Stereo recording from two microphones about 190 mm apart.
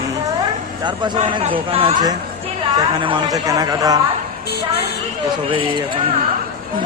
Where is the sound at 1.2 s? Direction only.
25° right (ahead or behind).